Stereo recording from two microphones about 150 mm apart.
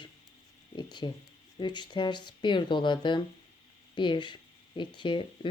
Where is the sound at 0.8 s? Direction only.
30° left (ahead or behind).